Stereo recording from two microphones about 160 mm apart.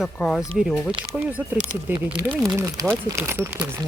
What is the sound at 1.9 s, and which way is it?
Speech, 10° right (ahead or behind).